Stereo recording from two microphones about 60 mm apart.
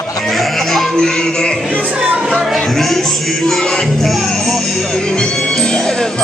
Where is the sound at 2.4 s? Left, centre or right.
Centre.